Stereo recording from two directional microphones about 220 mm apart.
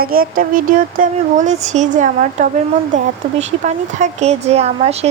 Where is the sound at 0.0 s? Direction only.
40° right (ahead or behind).